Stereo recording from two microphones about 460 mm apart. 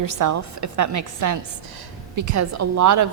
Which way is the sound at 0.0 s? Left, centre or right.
Right.